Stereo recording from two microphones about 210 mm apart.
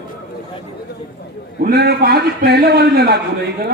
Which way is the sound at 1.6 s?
50° right (ahead or behind).